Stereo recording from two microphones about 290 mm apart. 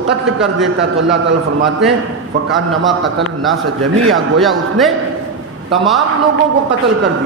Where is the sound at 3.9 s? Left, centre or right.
Right.